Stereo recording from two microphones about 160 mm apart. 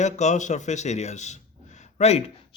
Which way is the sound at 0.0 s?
45° left (ahead or behind).